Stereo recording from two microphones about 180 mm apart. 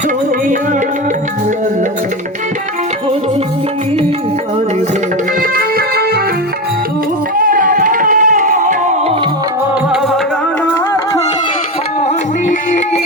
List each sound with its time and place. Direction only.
5.4 s music: 55° right (ahead or behind)
7.3 s music: 50° right (ahead or behind)